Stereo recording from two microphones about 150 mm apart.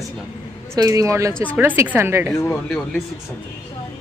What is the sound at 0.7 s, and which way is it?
A woman's voice, 25° right (ahead or behind).